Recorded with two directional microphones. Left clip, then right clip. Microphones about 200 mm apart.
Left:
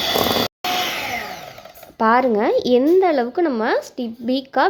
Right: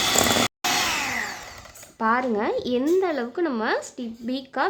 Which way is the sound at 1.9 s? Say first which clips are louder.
Left 7 dB; 25° left (ahead or behind).